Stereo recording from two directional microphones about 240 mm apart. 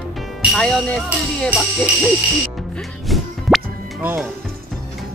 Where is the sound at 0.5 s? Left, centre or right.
Centre.